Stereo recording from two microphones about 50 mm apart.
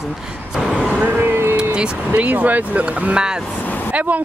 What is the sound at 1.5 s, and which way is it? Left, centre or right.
Vehicle, centre.